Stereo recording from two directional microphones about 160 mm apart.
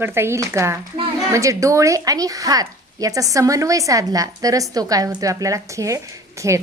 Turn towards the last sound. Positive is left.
turn(degrees=-20)  # may be behind; listen again after turning